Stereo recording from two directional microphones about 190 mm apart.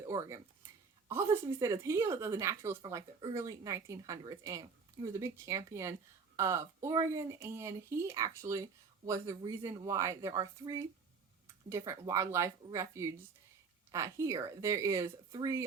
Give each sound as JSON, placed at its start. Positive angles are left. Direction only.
{"t": 0.0, "sound": "speech", "side_deg": -15}